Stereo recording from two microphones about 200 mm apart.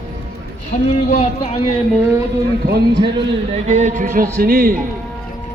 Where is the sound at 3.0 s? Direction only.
30° right (ahead or behind); by 4.8 s 45° right (ahead or behind).